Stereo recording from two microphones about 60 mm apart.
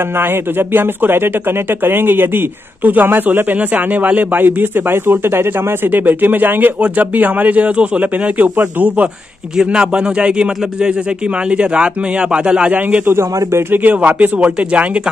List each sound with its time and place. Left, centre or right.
0.1 s speech: right
9.6 s a man's voice: centre
13.0 s a man's voice: right
13.7 s speech: right